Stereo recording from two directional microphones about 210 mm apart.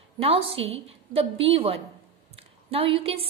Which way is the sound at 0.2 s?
25° right (ahead or behind).